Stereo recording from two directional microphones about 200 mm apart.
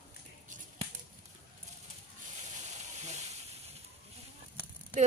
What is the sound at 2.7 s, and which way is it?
Hiss, 35° right (ahead or behind).